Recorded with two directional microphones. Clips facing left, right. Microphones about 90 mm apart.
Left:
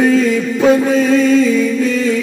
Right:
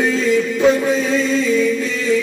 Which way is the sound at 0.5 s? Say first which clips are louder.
Left 7 dB; 45° left (ahead or behind).